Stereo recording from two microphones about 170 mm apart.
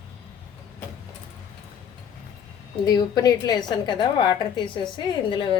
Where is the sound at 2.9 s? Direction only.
25° left (ahead or behind).